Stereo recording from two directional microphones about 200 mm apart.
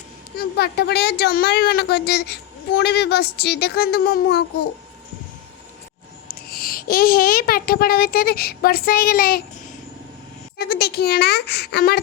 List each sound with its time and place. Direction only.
0.3 s a woman's voice: 55° left (ahead or behind)
6.2 s a woman's voice: 50° left (ahead or behind)
10.6 s speech: 50° left (ahead or behind)